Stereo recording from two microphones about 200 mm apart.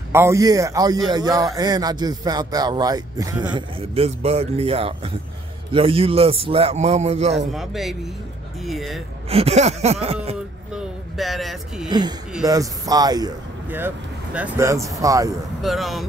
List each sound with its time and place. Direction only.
0.1 s a man's voice: 15° right (ahead or behind); by 7.4 s 30° right (ahead or behind)
7.5 s speech: centre (ahead or behind)
9.3 s a sound: 30° right (ahead or behind)
10.7 s speech: centre (ahead or behind)
11.9 s a man's voice: 20° right (ahead or behind)
15.6 s speech: centre (ahead or behind)